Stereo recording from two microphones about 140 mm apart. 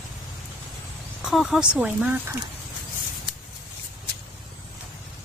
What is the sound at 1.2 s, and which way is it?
Speech, 5° right (ahead or behind).